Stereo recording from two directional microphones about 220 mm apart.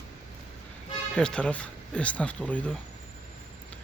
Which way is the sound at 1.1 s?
5° left (ahead or behind).